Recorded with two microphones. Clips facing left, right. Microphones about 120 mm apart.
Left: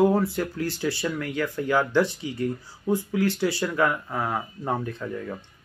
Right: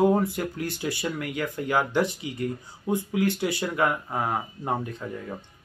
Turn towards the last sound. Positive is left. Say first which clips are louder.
# left 3 dB
turn(degrees=-20)  # may be behind; listen again after turning